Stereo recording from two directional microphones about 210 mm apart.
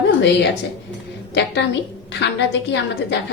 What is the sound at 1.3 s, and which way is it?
A woman's voice, 55° left (ahead or behind).